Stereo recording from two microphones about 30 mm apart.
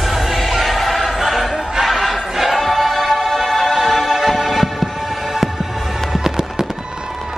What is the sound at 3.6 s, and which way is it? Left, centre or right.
Music, centre.